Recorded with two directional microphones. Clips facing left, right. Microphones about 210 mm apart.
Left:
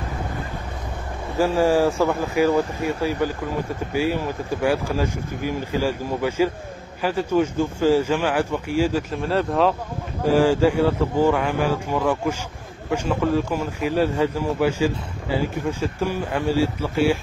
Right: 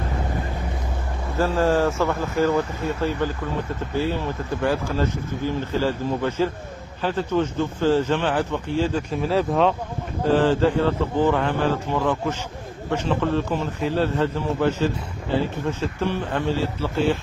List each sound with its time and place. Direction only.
1.4 s speech: 15° left (ahead or behind)
9.1 s speech: centre (ahead or behind)
10.2 s speech: 10° left (ahead or behind)